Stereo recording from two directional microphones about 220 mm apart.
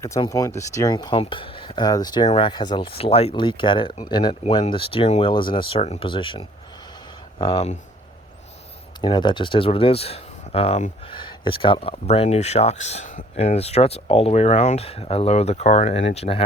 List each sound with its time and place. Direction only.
0.0 s speech: 15° left (ahead or behind)
9.0 s speech: 20° left (ahead or behind)